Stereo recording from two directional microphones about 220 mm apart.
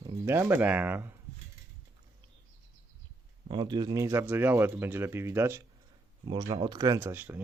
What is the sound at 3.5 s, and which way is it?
Speech, 20° right (ahead or behind).